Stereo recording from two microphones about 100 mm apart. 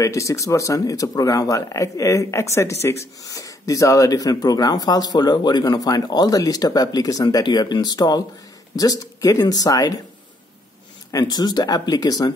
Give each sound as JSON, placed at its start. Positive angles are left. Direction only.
{"t": 0.0, "sound": "speech", "side_deg": 30}
{"t": 11.1, "sound": "speech", "side_deg": 40}